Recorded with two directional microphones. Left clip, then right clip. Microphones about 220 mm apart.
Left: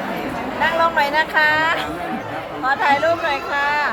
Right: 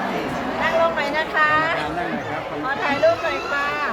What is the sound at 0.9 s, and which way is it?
Speech, 40° left (ahead or behind).